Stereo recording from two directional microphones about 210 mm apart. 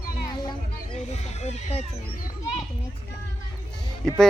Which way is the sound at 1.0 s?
30° left (ahead or behind).